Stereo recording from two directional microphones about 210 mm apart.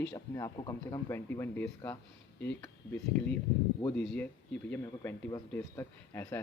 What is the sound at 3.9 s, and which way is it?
Speech, 5° left (ahead or behind).